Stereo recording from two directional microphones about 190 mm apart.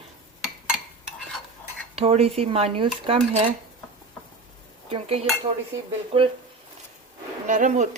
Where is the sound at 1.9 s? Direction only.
30° right (ahead or behind).